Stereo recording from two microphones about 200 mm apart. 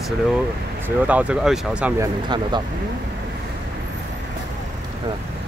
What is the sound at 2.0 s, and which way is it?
Speech, 20° right (ahead or behind).